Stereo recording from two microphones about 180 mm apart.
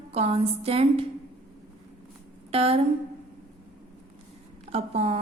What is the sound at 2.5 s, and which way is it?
Speech, 35° right (ahead or behind).